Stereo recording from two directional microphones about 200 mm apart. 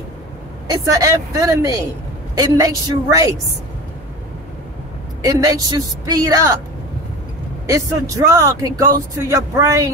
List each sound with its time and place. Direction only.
0.7 s speech: 15° right (ahead or behind)
5.2 s speech: 15° right (ahead or behind)
7.6 s speech: 15° right (ahead or behind)